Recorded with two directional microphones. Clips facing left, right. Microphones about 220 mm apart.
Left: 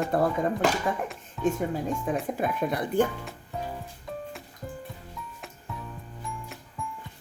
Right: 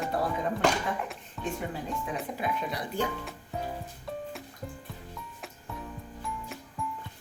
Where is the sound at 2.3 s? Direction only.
50° left (ahead or behind).